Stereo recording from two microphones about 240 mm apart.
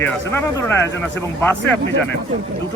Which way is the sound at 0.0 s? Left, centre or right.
Centre.